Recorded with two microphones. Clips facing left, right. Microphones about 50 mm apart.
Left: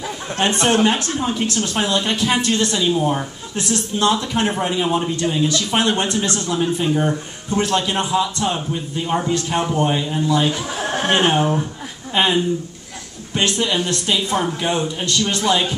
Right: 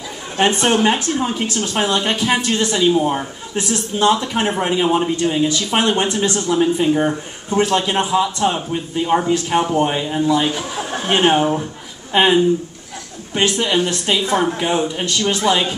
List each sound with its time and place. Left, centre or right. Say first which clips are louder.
0.8 s speech: right 2 dB; right
10.8 s chuckle: left 2 dB; left
11.1 s a man's voice: right 3 dB; centre